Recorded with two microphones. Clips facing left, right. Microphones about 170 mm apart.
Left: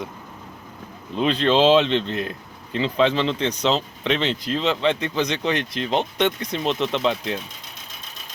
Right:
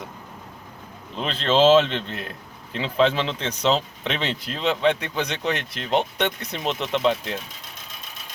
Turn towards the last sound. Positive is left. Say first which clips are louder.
# even
turn(degrees=-5)  # may be behind; listen again after turning